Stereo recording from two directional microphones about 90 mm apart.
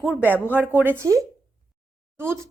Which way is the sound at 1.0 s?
35° right (ahead or behind).